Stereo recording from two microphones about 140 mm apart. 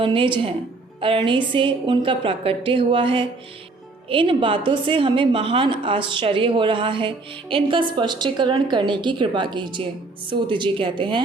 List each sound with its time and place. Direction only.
0.0 s a woman's voice: 35° right (ahead or behind)